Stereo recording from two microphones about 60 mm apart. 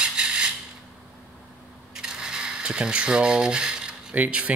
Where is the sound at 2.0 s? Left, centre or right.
Centre.